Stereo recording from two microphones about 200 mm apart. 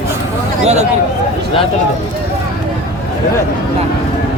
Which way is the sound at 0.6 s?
35° right (ahead or behind).